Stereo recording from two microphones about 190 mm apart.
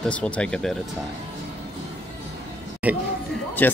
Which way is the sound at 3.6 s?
10° left (ahead or behind).